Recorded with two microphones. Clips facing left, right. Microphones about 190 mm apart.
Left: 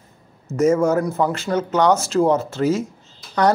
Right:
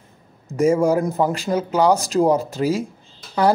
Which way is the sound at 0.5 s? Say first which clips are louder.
Even; 15° right (ahead or behind).